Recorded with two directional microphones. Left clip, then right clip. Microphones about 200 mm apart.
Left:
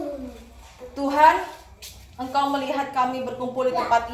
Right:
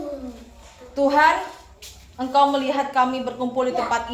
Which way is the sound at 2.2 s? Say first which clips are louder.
Right 5 dB; 45° right (ahead or behind).